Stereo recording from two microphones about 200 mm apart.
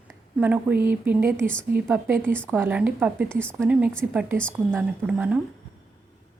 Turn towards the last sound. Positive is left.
turn(degrees=-5)  # may be behind; listen again after turning